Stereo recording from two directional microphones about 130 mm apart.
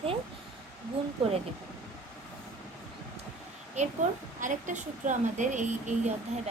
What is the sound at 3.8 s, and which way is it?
Speech, 60° right (ahead or behind).